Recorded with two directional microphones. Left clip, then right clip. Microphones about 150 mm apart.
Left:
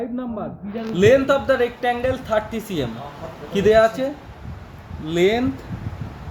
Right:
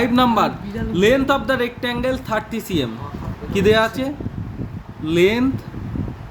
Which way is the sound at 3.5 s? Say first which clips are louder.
Left 1 dB; 60° right (ahead or behind).